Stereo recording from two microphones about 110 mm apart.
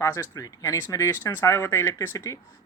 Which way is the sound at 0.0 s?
25° left (ahead or behind).